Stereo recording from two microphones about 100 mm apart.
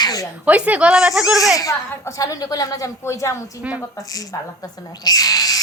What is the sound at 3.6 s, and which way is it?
Speech, 15° right (ahead or behind).